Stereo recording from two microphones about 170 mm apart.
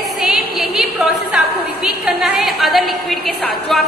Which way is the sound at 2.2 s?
Centre (ahead or behind).